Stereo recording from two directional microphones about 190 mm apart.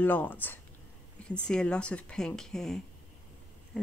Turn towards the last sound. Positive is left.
turn(degrees=5)  # may be behind; listen again after turning